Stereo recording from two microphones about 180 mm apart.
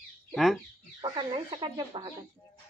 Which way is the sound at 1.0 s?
25° right (ahead or behind).